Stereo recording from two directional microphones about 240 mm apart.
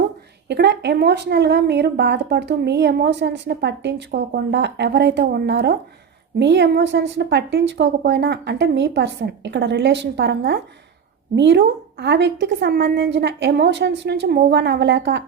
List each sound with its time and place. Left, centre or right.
0.4 s speech: right